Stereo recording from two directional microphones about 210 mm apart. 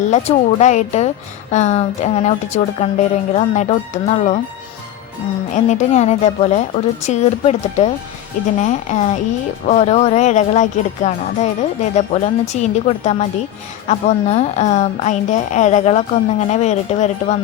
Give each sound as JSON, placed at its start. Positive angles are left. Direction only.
{"t": 0.1, "sound": "a woman's voice", "side_deg": 35}
{"t": 5.5, "sound": "a woman's voice", "side_deg": 35}